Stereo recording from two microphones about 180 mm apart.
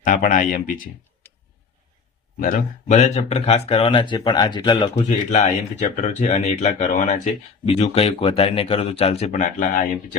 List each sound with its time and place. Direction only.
0.0 s speech: 45° left (ahead or behind)
2.4 s speech: 45° left (ahead or behind); by 4.9 s 25° left (ahead or behind)
4.9 s speech: 35° left (ahead or behind)